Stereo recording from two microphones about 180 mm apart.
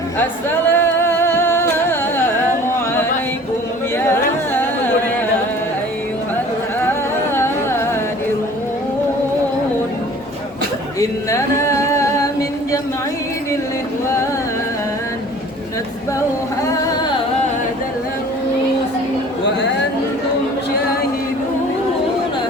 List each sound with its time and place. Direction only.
0.7 s music: 15° left (ahead or behind)
3.9 s carnatic music: 10° left (ahead or behind)
11.0 s singing: 15° left (ahead or behind)